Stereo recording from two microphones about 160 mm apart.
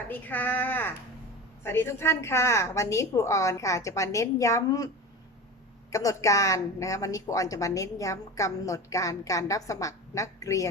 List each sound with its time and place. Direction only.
0.1 s a woman's voice: 10° left (ahead or behind)
5.9 s a woman's voice: 20° left (ahead or behind)